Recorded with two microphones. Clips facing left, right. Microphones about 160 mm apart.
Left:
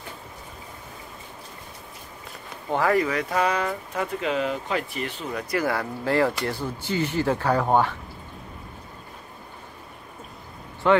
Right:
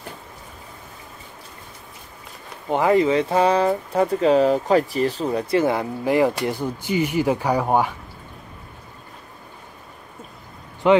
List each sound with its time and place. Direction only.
2.7 s speech: 20° right (ahead or behind)
10.8 s speech: 15° right (ahead or behind)